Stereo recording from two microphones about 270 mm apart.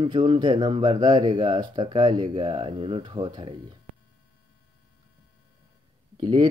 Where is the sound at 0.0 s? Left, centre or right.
Centre.